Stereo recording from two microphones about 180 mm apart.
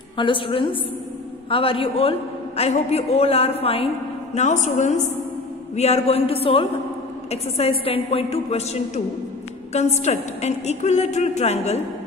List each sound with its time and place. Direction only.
0.2 s a woman's voice: 30° left (ahead or behind)